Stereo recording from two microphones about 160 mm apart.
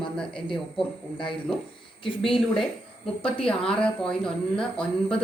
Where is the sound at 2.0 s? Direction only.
30° left (ahead or behind).